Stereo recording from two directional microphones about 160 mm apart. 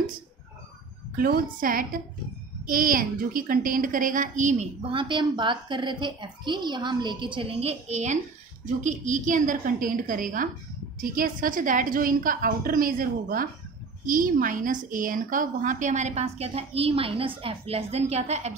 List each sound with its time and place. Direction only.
1.1 s a woman's voice: 65° right (ahead or behind)
4.9 s a woman's voice: 30° right (ahead or behind)